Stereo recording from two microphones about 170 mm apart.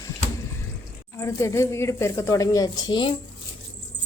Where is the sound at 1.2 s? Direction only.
15° left (ahead or behind).